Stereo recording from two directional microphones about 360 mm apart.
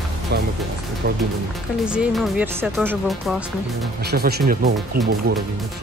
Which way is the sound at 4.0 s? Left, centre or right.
Right.